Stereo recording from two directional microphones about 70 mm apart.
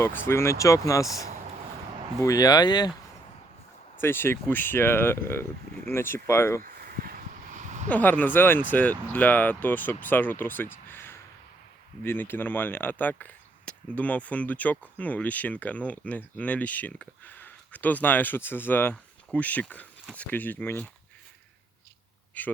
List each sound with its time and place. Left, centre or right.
0.0 s speech: left
2.1 s speech: left
2.4 s speech: left
4.0 s speech: left
7.9 s speech: left
22.4 s speech: left